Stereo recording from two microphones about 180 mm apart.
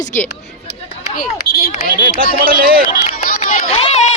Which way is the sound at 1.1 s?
55° left (ahead or behind).